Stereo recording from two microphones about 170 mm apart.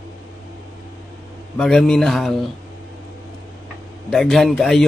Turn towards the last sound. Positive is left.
turn(degrees=0)  # may be behind; listen again after turning